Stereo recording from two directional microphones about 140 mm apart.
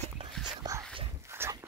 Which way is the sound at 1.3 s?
20° right (ahead or behind).